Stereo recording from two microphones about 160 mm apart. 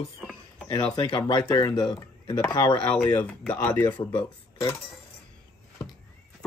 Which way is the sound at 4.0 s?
35° left (ahead or behind).